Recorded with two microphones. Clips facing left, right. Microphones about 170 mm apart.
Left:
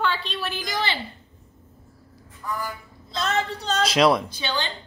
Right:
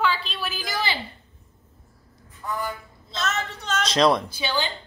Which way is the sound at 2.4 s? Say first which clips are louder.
Right 1 dB; 20° right (ahead or behind).